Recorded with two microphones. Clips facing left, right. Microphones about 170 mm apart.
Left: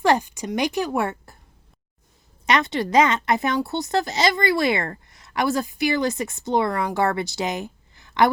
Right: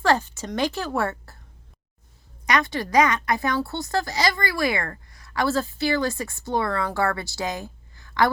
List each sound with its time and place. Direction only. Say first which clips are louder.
0.0 s speech: left 2 dB; 15° left (ahead or behind)
2.5 s a woman's voice: left 2 dB; 25° left (ahead or behind)